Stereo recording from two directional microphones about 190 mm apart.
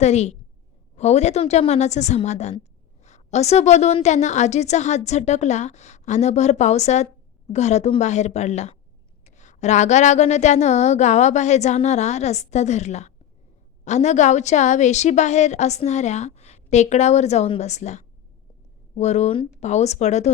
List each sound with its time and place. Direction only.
0.0 s a woman's voice: 35° left (ahead or behind)